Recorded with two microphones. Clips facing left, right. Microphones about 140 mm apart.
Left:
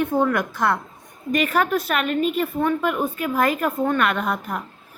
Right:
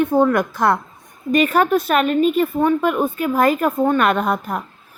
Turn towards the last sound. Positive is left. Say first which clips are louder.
# right 5 dB
turn(degrees=-35)  # may be behind; listen again after turning